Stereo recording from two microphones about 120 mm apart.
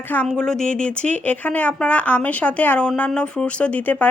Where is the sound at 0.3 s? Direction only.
5° left (ahead or behind).